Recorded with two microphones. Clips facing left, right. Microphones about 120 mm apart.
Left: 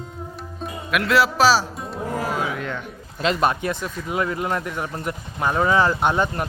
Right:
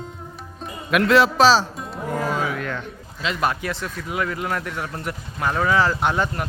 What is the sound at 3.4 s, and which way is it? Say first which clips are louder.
Speech: left 2 dB; 25° left (ahead or behind).